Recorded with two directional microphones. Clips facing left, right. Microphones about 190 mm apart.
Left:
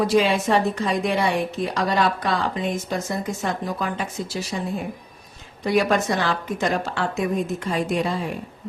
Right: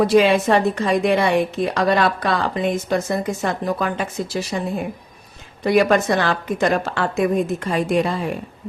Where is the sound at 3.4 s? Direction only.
65° right (ahead or behind).